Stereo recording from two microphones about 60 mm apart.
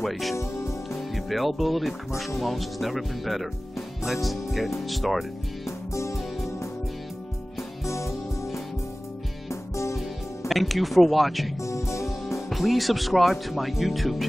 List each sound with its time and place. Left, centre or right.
0.0 s speech: centre
5.7 s music: left
7.8 s music: left
10.5 s speech: centre
11.6 s music: left
12.4 s speech: centre